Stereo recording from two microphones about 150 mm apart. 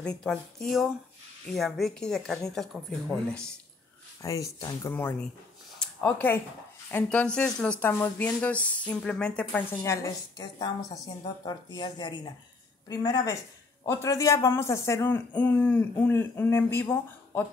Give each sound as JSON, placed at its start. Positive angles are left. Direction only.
{"t": 0.0, "sound": "speech", "side_deg": 5}
{"t": 4.2, "sound": "speech", "side_deg": 20}
{"t": 4.9, "sound": "speech", "side_deg": 10}
{"t": 5.8, "sound": "a sound", "side_deg": 10}
{"t": 6.9, "sound": "speech", "side_deg": 10}